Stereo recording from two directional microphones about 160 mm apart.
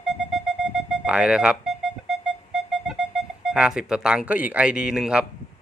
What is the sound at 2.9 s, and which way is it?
Speech, centre (ahead or behind).